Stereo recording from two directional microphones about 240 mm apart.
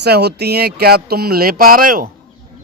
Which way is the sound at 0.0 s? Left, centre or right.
Right.